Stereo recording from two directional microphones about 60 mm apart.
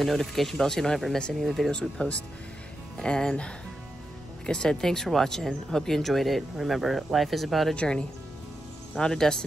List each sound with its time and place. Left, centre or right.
0.0 s speech: centre
1.7 s speech: centre
7.7 s speech: centre